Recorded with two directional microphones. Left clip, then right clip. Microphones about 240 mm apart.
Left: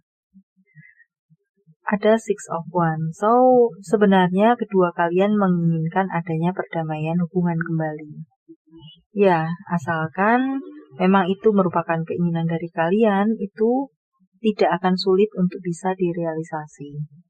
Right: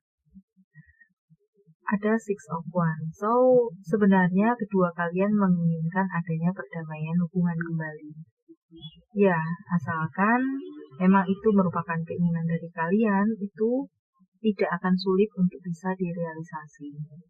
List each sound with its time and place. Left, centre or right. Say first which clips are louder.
1.8 s speech: left 9 dB; left
9.1 s speech: left 6 dB; left